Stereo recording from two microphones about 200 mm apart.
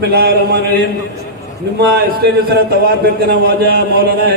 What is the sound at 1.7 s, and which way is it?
A man's voice, 55° right (ahead or behind).